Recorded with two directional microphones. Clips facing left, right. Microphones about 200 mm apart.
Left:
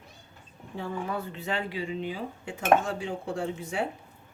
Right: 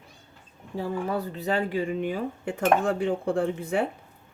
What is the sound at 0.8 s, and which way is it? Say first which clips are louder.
Speech: right 4 dB; 35° right (ahead or behind).